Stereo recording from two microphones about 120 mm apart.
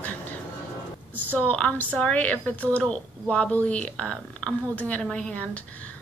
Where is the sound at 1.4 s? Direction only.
10° left (ahead or behind).